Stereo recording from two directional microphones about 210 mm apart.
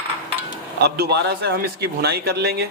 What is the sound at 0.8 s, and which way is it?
Speech, 50° right (ahead or behind).